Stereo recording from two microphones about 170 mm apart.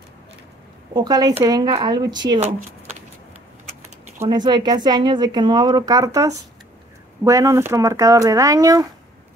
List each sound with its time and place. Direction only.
0.9 s speech: 20° right (ahead or behind)
4.3 s speech: 25° right (ahead or behind)